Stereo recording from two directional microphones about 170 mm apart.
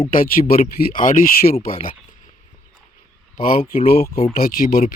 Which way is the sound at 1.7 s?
30° left (ahead or behind).